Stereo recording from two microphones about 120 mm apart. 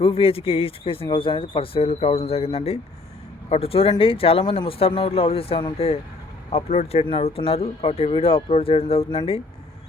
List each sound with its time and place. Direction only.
0.0 s speech: 50° left (ahead or behind)